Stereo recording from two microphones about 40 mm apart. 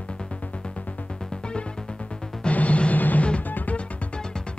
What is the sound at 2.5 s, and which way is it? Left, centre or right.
Music, left.